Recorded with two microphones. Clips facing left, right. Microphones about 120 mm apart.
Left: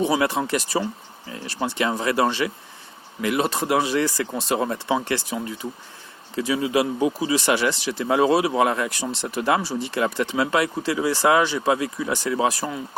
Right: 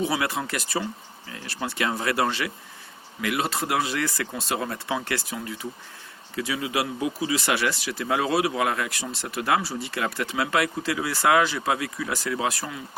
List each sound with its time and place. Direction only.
0.2 s speech: 25° left (ahead or behind)